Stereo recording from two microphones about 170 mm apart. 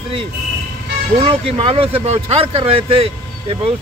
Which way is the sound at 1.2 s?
35° right (ahead or behind).